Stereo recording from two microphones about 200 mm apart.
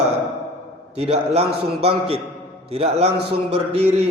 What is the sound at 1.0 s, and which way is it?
Speech, 30° right (ahead or behind).